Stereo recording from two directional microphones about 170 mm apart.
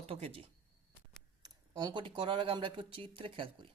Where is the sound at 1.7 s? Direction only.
25° right (ahead or behind).